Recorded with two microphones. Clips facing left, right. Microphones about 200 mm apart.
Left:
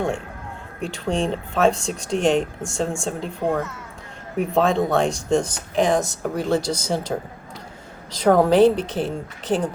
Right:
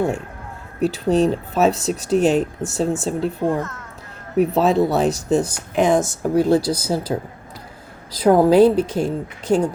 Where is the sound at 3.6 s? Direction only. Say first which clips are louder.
Right 1 dB; 10° left (ahead or behind).